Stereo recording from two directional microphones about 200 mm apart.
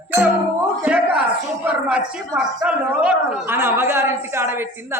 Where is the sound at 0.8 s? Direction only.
5° right (ahead or behind).